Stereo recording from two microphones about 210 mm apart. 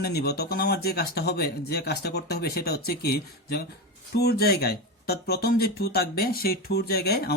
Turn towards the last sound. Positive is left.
turn(degrees=50)  # may be behind; listen again after turning